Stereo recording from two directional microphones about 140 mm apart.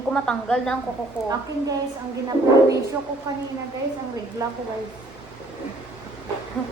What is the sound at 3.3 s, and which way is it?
Speech, 25° right (ahead or behind).